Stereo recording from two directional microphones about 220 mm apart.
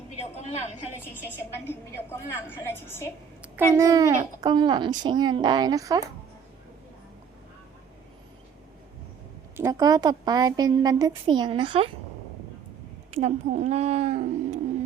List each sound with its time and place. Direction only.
1.6 s a woman's voice: 10° left (ahead or behind)
3.4 s a woman's voice: 5° right (ahead or behind)
9.6 s a woman's voice: 15° right (ahead or behind)
13.1 s speech: 30° right (ahead or behind)